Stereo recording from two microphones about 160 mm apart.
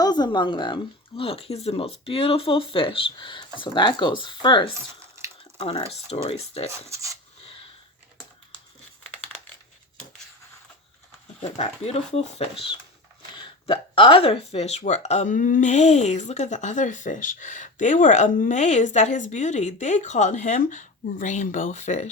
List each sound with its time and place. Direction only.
0.0 s speech: 25° left (ahead or behind)
6.7 s speech: 20° right (ahead or behind)
11.4 s speech: 40° left (ahead or behind)